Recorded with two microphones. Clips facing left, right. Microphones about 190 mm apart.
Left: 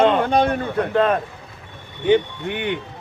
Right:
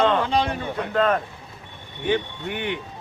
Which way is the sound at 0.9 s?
20° left (ahead or behind).